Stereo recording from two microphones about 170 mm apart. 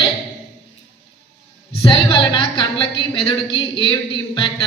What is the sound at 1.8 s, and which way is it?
A woman's voice, 25° left (ahead or behind).